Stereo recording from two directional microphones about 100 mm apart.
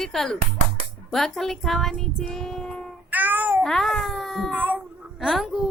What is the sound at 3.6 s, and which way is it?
Child singing, 5° left (ahead or behind).